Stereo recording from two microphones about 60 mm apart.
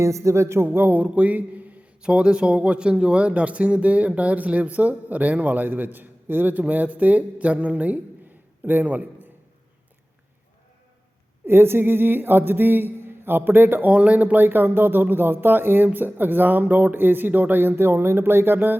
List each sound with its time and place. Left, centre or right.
0.0 s a man's voice: right
11.4 s speech: right
13.9 s speech: right